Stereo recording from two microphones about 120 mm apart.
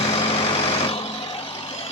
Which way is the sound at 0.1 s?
55° left (ahead or behind).